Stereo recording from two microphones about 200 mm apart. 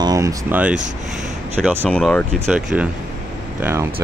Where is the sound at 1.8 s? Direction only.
5° left (ahead or behind).